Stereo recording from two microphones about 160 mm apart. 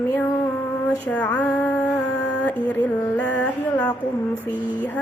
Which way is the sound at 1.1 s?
10° left (ahead or behind).